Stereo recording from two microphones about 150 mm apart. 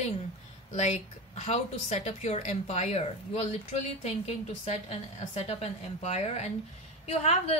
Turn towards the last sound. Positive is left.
turn(degrees=45)  # may be behind; listen again after turning